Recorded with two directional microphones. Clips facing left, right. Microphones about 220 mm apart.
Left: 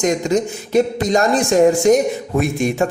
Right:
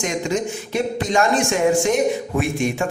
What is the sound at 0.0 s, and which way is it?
A man's voice, 40° left (ahead or behind).